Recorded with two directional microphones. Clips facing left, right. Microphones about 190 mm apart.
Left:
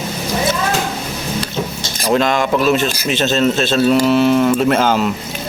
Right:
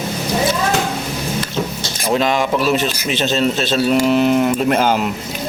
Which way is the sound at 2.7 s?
50° left (ahead or behind).